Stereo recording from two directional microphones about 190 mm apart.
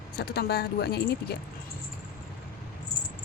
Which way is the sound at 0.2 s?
55° left (ahead or behind).